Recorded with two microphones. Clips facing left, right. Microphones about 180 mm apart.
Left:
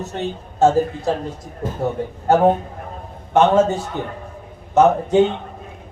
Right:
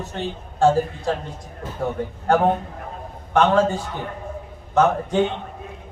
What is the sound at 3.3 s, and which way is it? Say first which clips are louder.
Speech: left 3 dB; 25° left (ahead or behind).